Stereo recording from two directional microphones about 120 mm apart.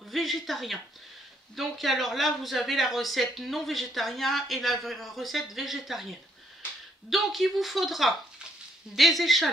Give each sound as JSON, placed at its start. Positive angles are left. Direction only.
{"t": 0.1, "sound": "speech", "side_deg": 0}
{"t": 7.1, "sound": "speech", "side_deg": 0}